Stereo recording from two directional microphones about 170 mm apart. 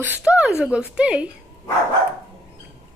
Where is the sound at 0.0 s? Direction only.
10° right (ahead or behind).